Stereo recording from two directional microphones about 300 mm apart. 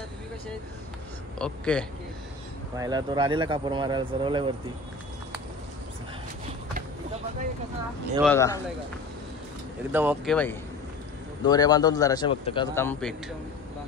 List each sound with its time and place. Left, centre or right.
1.4 s a man's voice: centre
2.8 s speech: centre
8.2 s a man's voice: centre
9.9 s speech: centre
10.3 s a man's voice: centre